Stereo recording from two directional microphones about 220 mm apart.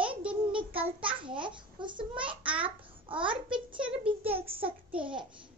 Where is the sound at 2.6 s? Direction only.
25° right (ahead or behind).